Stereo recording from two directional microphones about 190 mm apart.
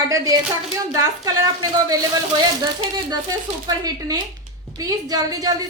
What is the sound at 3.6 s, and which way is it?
A woman's voice, 20° right (ahead or behind).